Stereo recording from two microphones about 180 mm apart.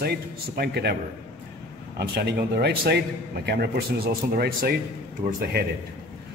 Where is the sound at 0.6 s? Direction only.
65° right (ahead or behind).